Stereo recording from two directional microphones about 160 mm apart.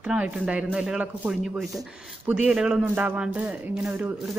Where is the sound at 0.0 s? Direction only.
5° right (ahead or behind).